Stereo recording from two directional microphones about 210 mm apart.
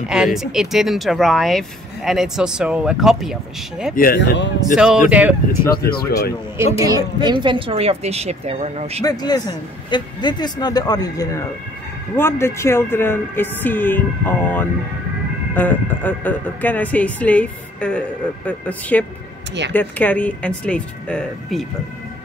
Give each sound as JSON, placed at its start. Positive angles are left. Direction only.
{"t": 0.1, "sound": "speech", "side_deg": 0}
{"t": 3.9, "sound": "speech", "side_deg": 45}
{"t": 4.7, "sound": "speech", "side_deg": -5}
{"t": 5.7, "sound": "speech", "side_deg": 45}
{"t": 6.8, "sound": "speech", "side_deg": -15}
{"t": 9.0, "sound": "speech", "side_deg": 20}